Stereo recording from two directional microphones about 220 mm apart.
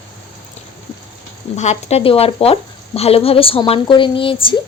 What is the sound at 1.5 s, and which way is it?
Speech, 30° left (ahead or behind).